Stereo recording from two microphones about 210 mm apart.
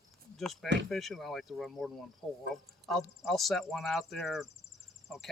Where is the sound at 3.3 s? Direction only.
Centre (ahead or behind).